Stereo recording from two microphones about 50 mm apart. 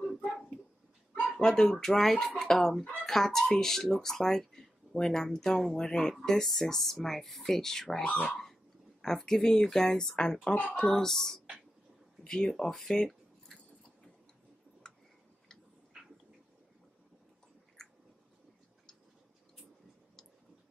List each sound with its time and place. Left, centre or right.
0.1 s a sound: centre
1.4 s speech: centre
8.0 s speech: left
9.0 s speech: centre
10.5 s speech: left
10.8 s speech: centre
14.8 s tick-tock: centre
15.9 s a sound: centre
17.8 s a sound: centre